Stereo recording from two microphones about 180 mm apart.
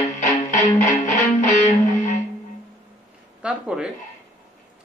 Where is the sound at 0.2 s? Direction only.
45° left (ahead or behind).